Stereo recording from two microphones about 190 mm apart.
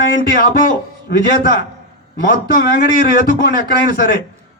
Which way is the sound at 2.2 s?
55° left (ahead or behind).